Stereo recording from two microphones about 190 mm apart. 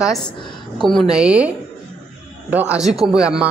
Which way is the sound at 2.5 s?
10° right (ahead or behind).